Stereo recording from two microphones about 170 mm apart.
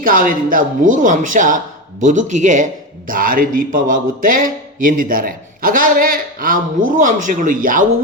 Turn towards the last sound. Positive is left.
turn(degrees=-55)  # may be behind; listen again after turning